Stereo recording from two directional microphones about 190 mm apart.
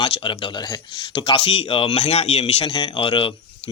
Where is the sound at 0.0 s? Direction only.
30° left (ahead or behind).